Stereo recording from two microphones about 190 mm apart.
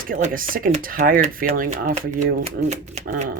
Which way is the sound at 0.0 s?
45° right (ahead or behind).